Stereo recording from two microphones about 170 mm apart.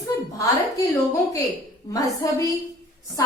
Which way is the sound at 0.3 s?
20° left (ahead or behind).